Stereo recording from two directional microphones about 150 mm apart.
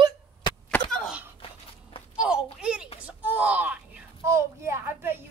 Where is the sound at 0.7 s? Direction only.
5° left (ahead or behind).